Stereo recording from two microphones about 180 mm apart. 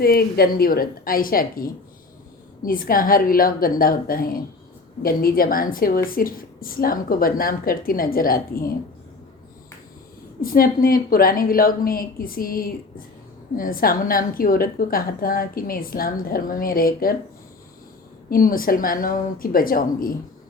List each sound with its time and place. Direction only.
0.0 s a woman's voice: 55° left (ahead or behind)
10.4 s a woman's voice: 55° left (ahead or behind)
18.3 s a woman's voice: 50° left (ahead or behind)